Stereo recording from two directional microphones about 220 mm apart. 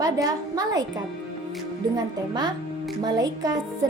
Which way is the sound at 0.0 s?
15° right (ahead or behind).